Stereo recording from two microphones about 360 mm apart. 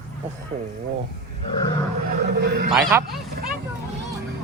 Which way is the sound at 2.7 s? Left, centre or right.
Centre.